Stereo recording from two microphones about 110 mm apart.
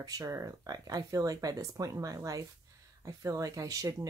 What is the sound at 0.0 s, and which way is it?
Speech, 30° right (ahead or behind).